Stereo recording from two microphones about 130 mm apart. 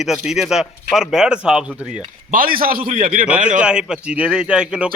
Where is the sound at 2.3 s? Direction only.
90° right.